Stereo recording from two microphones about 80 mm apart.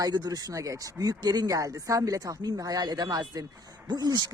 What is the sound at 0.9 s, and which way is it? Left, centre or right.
Speech, right.